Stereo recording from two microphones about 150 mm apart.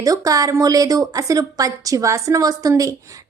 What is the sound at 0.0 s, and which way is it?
A woman's voice, 25° right (ahead or behind).